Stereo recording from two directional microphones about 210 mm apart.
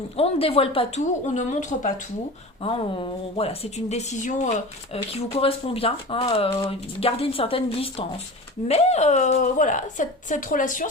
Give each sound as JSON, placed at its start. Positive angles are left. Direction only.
{"t": 0.2, "sound": "speech", "side_deg": 25}
{"t": 2.6, "sound": "a woman's voice", "side_deg": 25}